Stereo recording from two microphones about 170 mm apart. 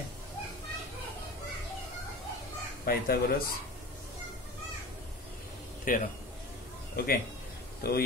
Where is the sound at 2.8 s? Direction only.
60° left (ahead or behind).